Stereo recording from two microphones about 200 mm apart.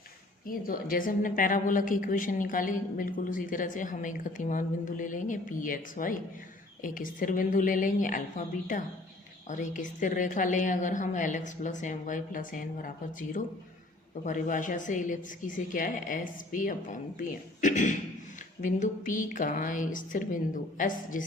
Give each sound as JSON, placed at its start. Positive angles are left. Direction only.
{"t": 0.4, "sound": "a woman's voice", "side_deg": 45}